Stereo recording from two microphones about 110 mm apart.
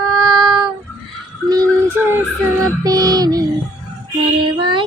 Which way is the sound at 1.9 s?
20° right (ahead or behind).